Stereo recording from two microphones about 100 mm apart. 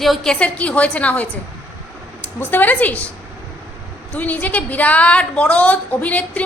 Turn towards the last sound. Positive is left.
turn(degrees=15)  # may be behind; listen again after turning